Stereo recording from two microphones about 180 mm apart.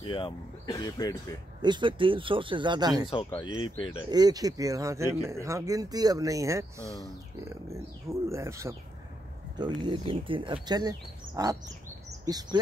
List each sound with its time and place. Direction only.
0.0 s speech: 25° left (ahead or behind)
1.6 s speech: 25° right (ahead or behind)
3.3 s speech: 25° left (ahead or behind)
4.1 s speech: 20° right (ahead or behind)